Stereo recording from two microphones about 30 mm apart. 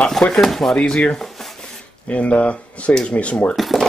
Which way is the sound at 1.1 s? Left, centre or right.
Centre.